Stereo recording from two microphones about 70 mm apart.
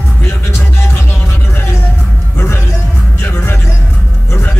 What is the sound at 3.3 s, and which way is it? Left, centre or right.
Vehicle, left.